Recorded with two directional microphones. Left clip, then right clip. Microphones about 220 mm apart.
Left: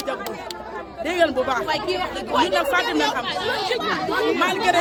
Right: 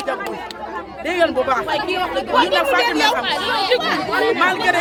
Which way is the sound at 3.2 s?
50° right (ahead or behind).